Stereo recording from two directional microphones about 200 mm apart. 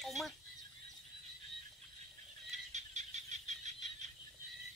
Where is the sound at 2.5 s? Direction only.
35° right (ahead or behind).